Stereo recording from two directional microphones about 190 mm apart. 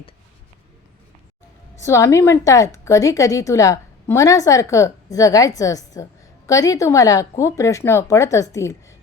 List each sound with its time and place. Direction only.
1.8 s a woman's voice: 15° left (ahead or behind)